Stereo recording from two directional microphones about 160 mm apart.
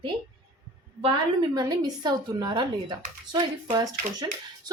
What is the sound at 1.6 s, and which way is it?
Speech, 25° right (ahead or behind).